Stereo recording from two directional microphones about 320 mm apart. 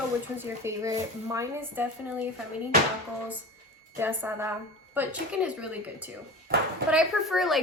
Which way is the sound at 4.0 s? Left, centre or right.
Centre.